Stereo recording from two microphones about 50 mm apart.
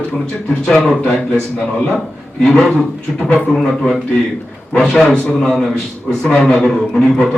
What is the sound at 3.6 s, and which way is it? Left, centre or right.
A man's voice, centre.